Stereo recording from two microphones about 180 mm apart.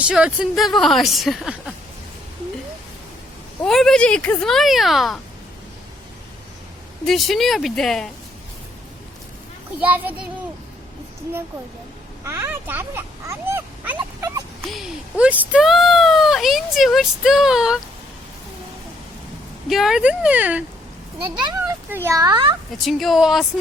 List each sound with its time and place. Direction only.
0.0 s speech: 5° right (ahead or behind)
3.6 s speech: centre (ahead or behind)
7.0 s speech: centre (ahead or behind)
9.8 s speech: 10° right (ahead or behind)
12.2 s a sound: 15° right (ahead or behind)
14.7 s speech: 5° right (ahead or behind)
19.6 s speech: centre (ahead or behind)
21.8 s a child's voice: 15° right (ahead or behind)
22.8 s speech: centre (ahead or behind)